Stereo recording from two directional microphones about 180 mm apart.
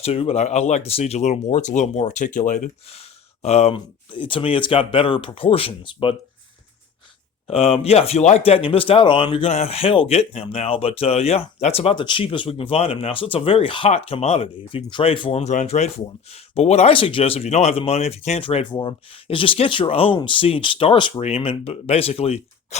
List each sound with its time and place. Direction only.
0.0 s speech: 35° left (ahead or behind)
7.4 s speech: 35° left (ahead or behind)